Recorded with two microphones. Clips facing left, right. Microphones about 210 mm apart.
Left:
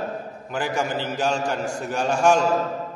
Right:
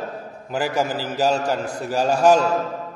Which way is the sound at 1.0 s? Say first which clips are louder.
Right 3 dB; 35° right (ahead or behind).